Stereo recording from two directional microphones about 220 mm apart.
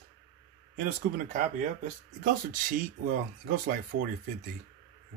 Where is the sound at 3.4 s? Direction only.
45° right (ahead or behind).